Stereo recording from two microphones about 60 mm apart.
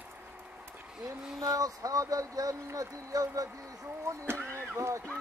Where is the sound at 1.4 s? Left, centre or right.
Right.